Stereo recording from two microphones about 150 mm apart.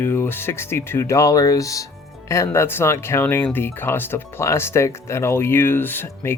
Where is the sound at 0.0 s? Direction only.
15° left (ahead or behind).